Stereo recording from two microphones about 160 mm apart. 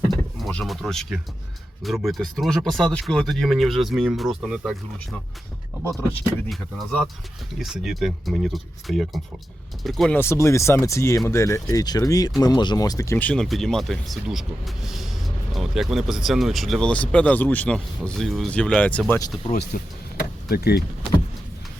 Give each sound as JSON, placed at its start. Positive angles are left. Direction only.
{"t": 0.1, "sound": "speech", "side_deg": 0}
{"t": 6.5, "sound": "speech", "side_deg": 0}
{"t": 10.2, "sound": "speech", "side_deg": 15}
{"t": 19.7, "sound": "speech", "side_deg": 65}
{"t": 20.5, "sound": "speech", "side_deg": 80}